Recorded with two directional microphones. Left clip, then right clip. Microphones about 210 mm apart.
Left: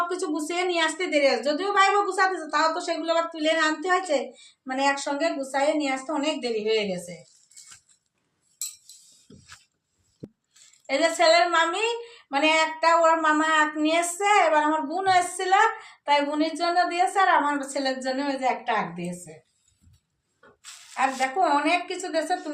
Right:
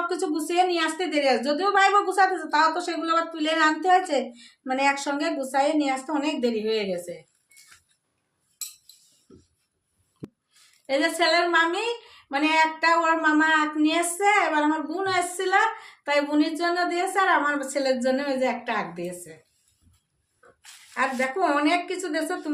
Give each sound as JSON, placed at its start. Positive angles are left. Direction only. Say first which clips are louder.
{"t": 0.1, "sound": "a woman's voice", "louder": "right 2 dB", "side_deg": -15}
{"t": 10.2, "sound": "a sound", "louder": "right 2 dB", "side_deg": 0}
{"t": 10.8, "sound": "a woman's voice", "louder": "left 2 dB", "side_deg": -20}
{"t": 21.4, "sound": "a woman's voice", "louder": "even", "side_deg": -25}